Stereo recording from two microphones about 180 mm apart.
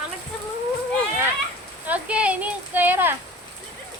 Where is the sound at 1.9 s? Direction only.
5° right (ahead or behind).